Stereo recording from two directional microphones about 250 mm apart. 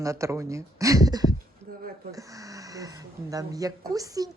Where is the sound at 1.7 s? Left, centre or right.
Right.